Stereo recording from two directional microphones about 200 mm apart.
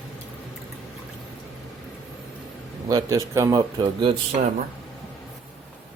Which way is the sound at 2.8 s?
15° right (ahead or behind).